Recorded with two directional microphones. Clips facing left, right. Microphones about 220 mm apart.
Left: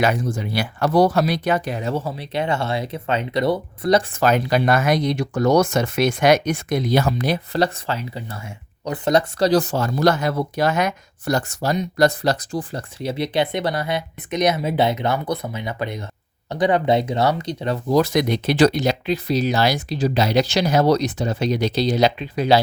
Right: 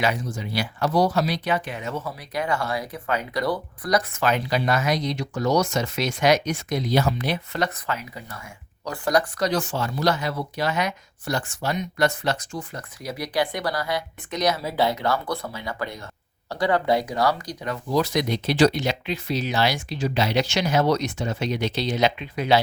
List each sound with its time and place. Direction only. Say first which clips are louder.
0.0 s speech: left 5 dB; 50° left (ahead or behind); by 4.2 s 25° left (ahead or behind)
4.2 s speech: left 5 dB; 45° left (ahead or behind)
7.1 s speech: left 5 dB; 40° left (ahead or behind)
17.9 s speech: left 4 dB; 50° left (ahead or behind)